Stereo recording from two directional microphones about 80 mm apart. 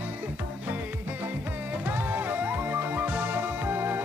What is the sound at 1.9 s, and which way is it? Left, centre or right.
Music, right.